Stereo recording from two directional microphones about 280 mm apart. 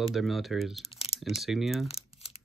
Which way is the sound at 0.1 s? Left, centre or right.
Centre.